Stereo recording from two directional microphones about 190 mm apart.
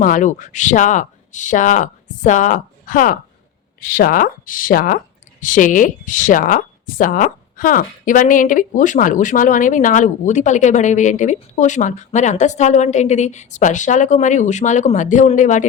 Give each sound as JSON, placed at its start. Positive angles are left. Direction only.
{"t": 0.0, "sound": "speech", "side_deg": 45}